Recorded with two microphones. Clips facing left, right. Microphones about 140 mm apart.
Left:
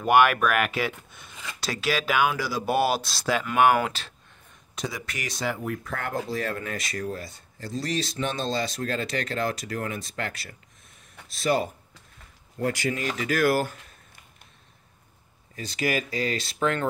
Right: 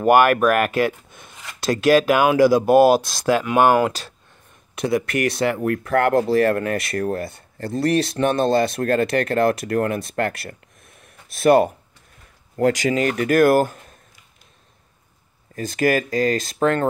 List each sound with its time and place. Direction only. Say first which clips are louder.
0.0 s speech: right 5 dB; 45° right (ahead or behind)
3.5 s speech: right 3 dB; 35° right (ahead or behind)
4.7 s speech: right 13 dB; 60° right (ahead or behind)
11.0 s a sound: right 9 dB; 55° right (ahead or behind)
12.5 s speech: right 9 dB; 85° right; by 13.9 s 45° right (ahead or behind)
15.5 s speech: right 8 dB; 50° right (ahead or behind)